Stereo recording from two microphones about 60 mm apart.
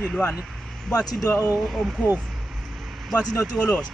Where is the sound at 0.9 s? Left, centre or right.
Left.